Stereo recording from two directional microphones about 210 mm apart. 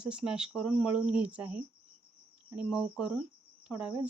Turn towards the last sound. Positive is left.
turn(degrees=-5)  # may be behind; listen again after turning